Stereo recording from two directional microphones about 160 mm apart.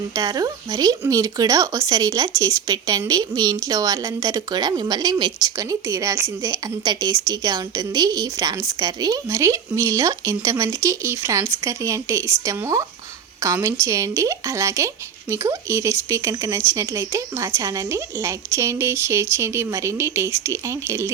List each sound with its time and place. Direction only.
0.2 s a woman's voice: 25° right (ahead or behind)